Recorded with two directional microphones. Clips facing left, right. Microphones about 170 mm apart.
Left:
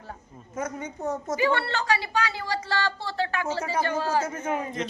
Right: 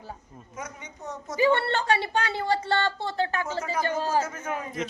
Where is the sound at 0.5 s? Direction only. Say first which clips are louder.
Left 8 dB; 50° left (ahead or behind).